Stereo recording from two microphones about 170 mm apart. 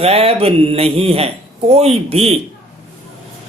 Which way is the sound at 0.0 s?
35° right (ahead or behind).